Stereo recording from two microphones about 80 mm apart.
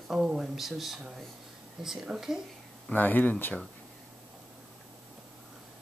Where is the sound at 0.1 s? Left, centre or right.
Centre.